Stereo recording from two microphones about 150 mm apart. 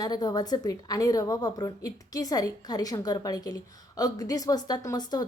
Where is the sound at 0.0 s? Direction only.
25° left (ahead or behind).